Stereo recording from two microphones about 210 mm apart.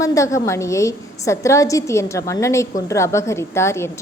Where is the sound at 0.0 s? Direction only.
15° left (ahead or behind).